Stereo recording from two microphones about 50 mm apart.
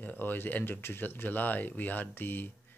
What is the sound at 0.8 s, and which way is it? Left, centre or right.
Speech, left.